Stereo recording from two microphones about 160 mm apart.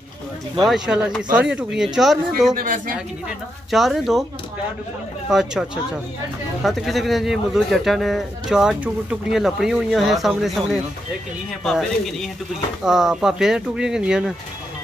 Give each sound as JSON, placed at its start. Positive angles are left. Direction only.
{"t": 0.6, "sound": "speech", "side_deg": 0}
{"t": 2.5, "sound": "speech", "side_deg": -55}
{"t": 3.7, "sound": "speech", "side_deg": 0}
{"t": 5.3, "sound": "speech", "side_deg": -5}